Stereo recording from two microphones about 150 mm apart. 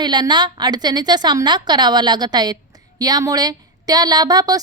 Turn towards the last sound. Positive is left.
turn(degrees=-25)  # may be behind; listen again after turning